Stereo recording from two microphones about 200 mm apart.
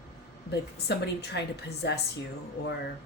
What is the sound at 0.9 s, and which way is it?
A woman's voice, 55° left (ahead or behind).